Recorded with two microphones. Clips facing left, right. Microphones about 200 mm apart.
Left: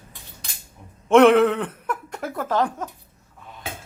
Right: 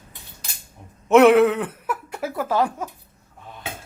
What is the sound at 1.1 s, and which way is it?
Speech, 5° right (ahead or behind).